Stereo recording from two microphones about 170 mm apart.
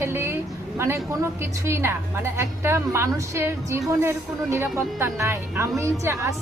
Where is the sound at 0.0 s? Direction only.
15° right (ahead or behind).